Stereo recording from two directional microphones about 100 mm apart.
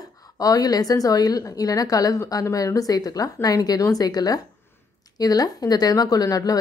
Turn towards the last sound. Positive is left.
turn(degrees=40)  # may be behind; listen again after turning